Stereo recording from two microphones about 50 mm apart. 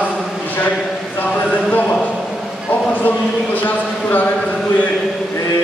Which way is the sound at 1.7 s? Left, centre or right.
Left.